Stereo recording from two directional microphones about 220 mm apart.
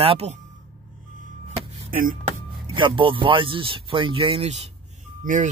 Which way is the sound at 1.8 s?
40° right (ahead or behind).